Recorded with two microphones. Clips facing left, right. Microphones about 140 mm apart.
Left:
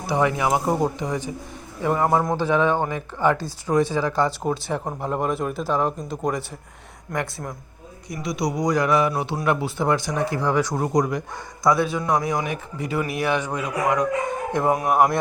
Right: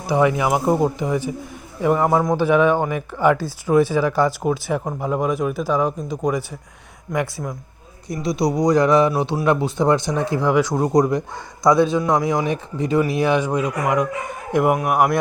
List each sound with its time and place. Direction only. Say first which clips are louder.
0.1 s speech: right 3 dB; 15° right (ahead or behind)
8.1 s speech: right 5 dB; 30° right (ahead or behind); by 15.2 s 5° right (ahead or behind)